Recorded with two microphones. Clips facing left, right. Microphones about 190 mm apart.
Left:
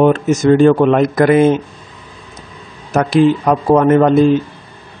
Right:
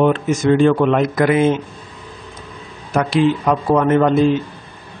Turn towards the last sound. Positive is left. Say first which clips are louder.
# left 4 dB
turn(degrees=45)  # may be behind; listen again after turning